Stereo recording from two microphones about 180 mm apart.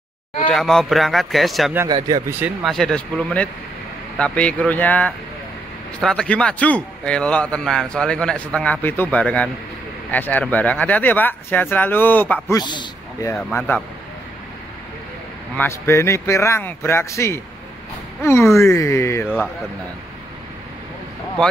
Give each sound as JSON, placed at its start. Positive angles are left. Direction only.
{"t": 0.5, "sound": "a man's voice", "side_deg": 5}
{"t": 1.9, "sound": "speech", "side_deg": -25}
{"t": 2.4, "sound": "a man's voice", "side_deg": 0}
{"t": 12.4, "sound": "a man's voice", "side_deg": 20}
{"t": 13.3, "sound": "speech", "side_deg": 5}
{"t": 15.5, "sound": "speech", "side_deg": 10}